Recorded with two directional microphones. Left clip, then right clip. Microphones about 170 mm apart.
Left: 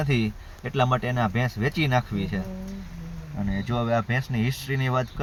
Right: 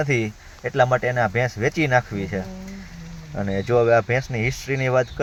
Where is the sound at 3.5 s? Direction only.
30° right (ahead or behind).